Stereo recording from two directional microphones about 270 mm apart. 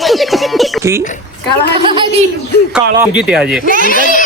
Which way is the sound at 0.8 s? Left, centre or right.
Centre.